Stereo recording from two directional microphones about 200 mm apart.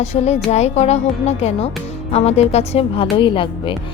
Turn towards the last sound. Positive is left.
turn(degrees=25)  # may be behind; listen again after turning